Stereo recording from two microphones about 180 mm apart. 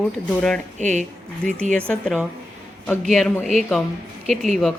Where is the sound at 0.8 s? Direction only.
40° right (ahead or behind).